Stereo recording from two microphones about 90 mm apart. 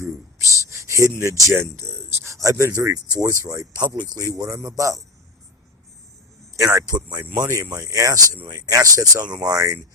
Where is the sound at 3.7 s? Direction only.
50° right (ahead or behind).